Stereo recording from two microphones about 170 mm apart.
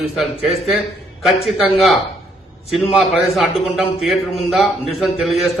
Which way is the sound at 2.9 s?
Centre (ahead or behind).